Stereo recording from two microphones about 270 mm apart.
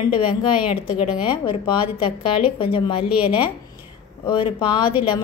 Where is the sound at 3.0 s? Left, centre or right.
Centre.